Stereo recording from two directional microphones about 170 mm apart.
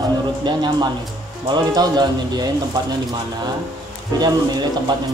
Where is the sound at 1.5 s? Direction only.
25° right (ahead or behind).